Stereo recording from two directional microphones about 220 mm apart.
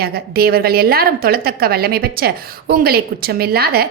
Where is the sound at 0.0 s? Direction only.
45° right (ahead or behind).